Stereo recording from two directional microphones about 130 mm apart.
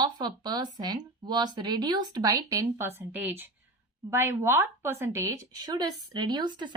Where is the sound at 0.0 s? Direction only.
35° right (ahead or behind).